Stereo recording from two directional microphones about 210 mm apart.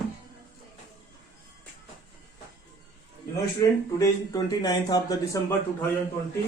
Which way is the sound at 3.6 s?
15° left (ahead or behind).